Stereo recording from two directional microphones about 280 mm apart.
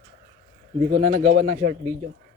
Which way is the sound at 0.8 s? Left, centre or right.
Right.